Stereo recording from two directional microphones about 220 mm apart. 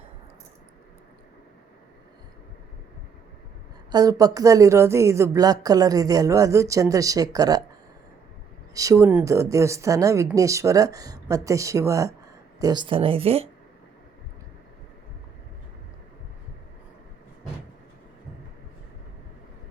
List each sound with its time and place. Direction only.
3.9 s a woman's voice: 15° right (ahead or behind)
8.7 s a woman's voice: 15° right (ahead or behind)